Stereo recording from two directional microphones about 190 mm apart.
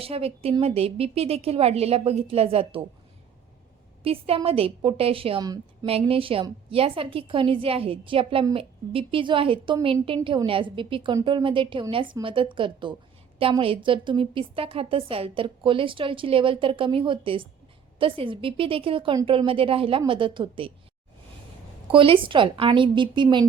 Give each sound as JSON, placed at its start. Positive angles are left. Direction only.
{"t": 0.0, "sound": "a woman's voice", "side_deg": -30}
{"t": 4.0, "sound": "a woman's voice", "side_deg": -30}
{"t": 21.9, "sound": "a woman's voice", "side_deg": -25}